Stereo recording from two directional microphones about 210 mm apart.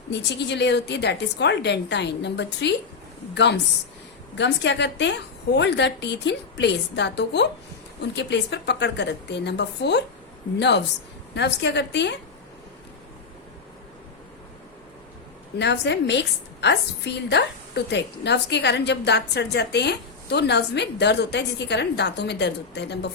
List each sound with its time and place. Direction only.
0.1 s a woman's voice: 55° left (ahead or behind)
15.5 s a woman's voice: 55° left (ahead or behind)